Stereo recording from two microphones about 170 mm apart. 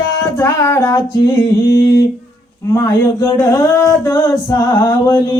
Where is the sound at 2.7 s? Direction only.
15° left (ahead or behind).